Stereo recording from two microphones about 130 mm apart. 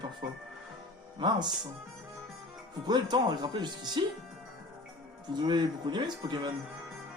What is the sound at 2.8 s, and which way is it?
Speech, 35° right (ahead or behind).